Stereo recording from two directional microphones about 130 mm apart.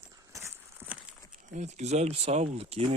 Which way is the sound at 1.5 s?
65° right (ahead or behind).